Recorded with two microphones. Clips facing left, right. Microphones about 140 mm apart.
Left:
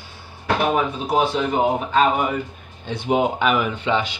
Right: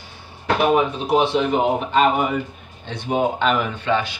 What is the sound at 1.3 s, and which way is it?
Speech, centre (ahead or behind).